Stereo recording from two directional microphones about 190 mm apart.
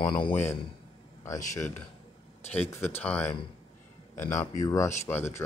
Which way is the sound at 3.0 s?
10° left (ahead or behind).